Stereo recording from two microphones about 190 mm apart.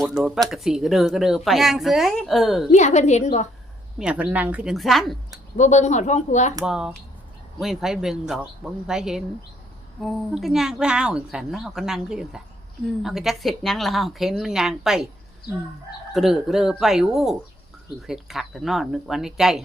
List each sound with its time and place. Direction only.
0.0 s a woman's voice: centre (ahead or behind)
2.7 s speech: 40° left (ahead or behind)
3.9 s a woman's voice: 5° right (ahead or behind)
5.5 s speech: 40° left (ahead or behind)
6.7 s a woman's voice: 5° right (ahead or behind)
16.1 s a woman's voice: centre (ahead or behind)